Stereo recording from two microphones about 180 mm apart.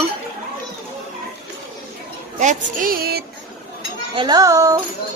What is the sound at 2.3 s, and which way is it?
Speech, 45° right (ahead or behind).